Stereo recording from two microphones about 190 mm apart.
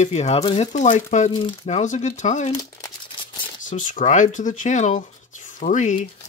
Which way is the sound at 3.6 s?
40° left (ahead or behind).